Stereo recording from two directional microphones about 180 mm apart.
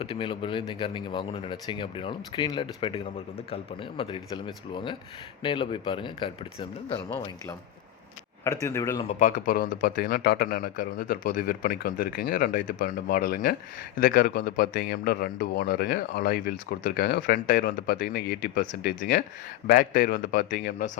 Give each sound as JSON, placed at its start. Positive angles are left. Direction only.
{"t": 0.0, "sound": "speech", "side_deg": 30}
{"t": 8.4, "sound": "speech", "side_deg": 15}
{"t": 9.0, "sound": "speech", "side_deg": 45}